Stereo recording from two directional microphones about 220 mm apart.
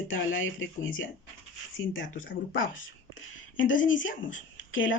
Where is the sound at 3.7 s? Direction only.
60° left (ahead or behind).